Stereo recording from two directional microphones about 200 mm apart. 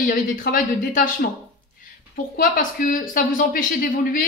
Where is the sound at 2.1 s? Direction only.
45° left (ahead or behind).